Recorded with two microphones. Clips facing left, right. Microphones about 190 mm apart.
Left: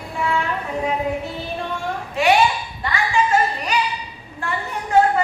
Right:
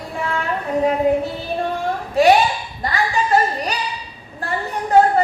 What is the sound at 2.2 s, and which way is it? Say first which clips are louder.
Speech: right 5 dB; 35° right (ahead or behind).